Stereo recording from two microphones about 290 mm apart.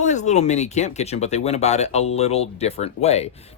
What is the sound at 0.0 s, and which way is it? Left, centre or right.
Speech, left.